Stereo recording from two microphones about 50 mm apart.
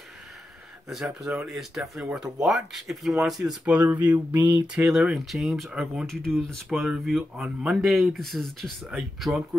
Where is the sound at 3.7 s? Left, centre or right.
Right.